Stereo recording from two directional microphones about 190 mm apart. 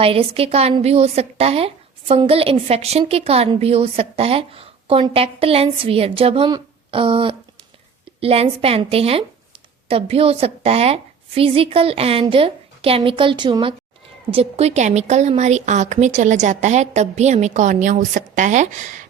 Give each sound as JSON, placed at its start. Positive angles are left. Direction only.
{"t": 0.0, "sound": "a woman's voice", "side_deg": -30}